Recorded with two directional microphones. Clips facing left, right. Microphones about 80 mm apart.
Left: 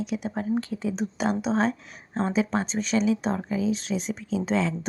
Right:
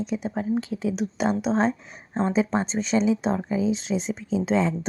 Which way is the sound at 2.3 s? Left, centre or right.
Right.